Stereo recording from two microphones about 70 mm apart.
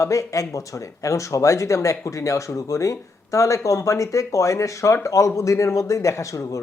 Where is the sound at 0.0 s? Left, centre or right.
Left.